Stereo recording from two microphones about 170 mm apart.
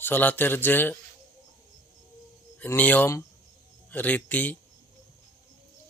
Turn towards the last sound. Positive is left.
turn(degrees=10)  # may be behind; listen again after turning